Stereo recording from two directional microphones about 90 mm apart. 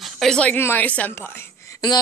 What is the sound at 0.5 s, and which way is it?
Speech, 25° left (ahead or behind).